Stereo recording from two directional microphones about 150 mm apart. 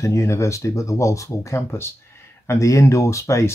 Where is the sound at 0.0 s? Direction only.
20° left (ahead or behind).